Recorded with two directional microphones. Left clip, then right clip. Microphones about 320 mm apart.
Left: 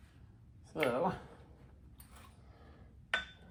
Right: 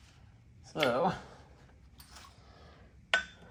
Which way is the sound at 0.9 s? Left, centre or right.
Right.